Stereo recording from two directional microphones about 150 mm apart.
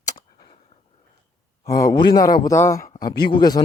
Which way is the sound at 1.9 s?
30° left (ahead or behind).